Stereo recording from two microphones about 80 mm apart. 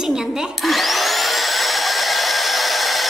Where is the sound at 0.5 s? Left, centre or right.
Centre.